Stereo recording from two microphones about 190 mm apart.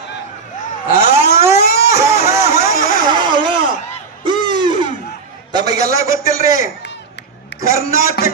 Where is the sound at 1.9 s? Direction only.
15° right (ahead or behind).